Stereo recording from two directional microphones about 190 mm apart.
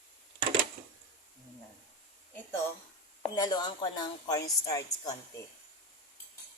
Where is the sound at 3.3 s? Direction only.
20° left (ahead or behind).